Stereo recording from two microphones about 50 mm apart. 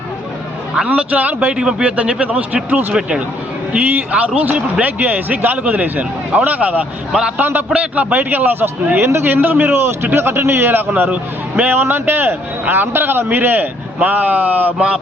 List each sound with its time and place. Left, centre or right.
0.9 s a man's voice: right
1.5 s a man's voice: centre
4.1 s speech: right
7.1 s a man's voice: centre
7.7 s a man's voice: right
8.1 s speech: right
9.2 s speech: right
9.8 s speech: right
11.1 s a man's voice: right
11.7 s speech: right
14.8 s a man's voice: right